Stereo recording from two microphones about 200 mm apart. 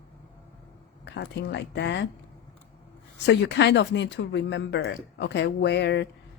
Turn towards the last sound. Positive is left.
turn(degrees=60)  # may be behind; listen again after turning